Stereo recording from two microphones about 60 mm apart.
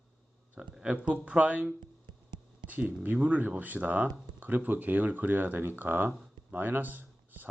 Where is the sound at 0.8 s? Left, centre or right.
Centre.